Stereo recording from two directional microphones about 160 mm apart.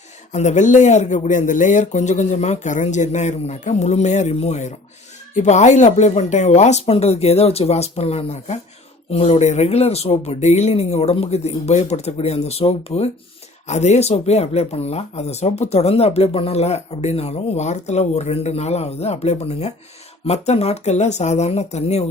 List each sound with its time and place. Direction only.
0.3 s speech: 50° left (ahead or behind)